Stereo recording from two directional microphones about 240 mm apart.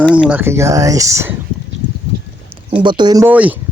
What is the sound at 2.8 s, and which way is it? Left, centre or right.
Speech, centre.